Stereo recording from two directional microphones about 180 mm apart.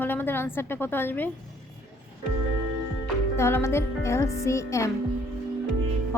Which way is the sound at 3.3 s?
15° left (ahead or behind).